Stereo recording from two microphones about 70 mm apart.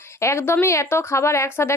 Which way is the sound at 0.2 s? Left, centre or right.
Left.